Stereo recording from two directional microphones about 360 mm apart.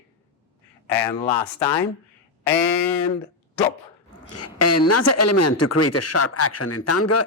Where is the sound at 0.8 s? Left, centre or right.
Centre.